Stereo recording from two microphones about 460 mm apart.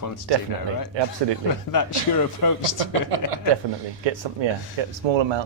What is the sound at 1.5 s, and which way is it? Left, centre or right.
A man's voice, left.